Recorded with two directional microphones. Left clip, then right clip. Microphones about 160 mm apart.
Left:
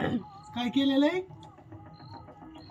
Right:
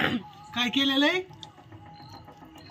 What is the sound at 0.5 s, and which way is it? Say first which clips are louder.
Speech: right 3 dB; 5° left (ahead or behind).